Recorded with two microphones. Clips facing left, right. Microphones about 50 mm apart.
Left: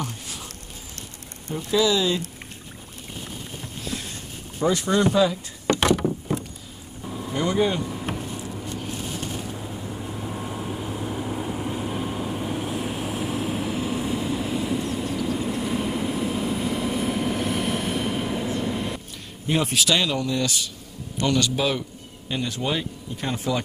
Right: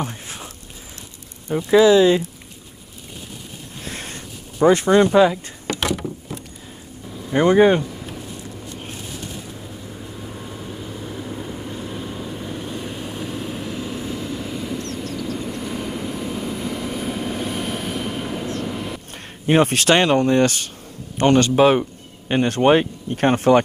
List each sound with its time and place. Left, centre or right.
0.0 s a sound: right
1.5 s speech: right
4.6 s speech: right
5.7 s vehicle: centre
6.0 s boat: centre
7.3 s speech: right
8.2 s vehicle: centre
19.4 s speech: right